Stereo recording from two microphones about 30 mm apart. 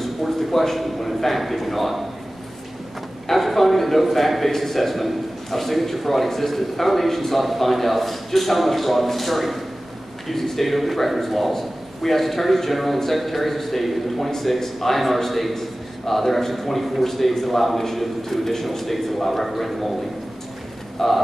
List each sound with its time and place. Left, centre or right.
0.0 s a sound: centre
0.7 s speech: centre
3.3 s a man's voice: centre
21.0 s a man's voice: centre